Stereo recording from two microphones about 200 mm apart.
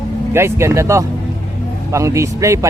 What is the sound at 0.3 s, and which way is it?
Speech, 15° right (ahead or behind).